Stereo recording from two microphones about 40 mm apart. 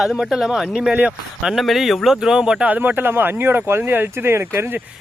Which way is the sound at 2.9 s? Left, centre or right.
Right.